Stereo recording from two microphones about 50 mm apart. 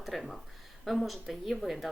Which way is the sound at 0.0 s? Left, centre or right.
Centre.